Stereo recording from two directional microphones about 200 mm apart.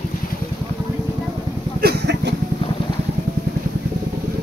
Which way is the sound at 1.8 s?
55° right (ahead or behind).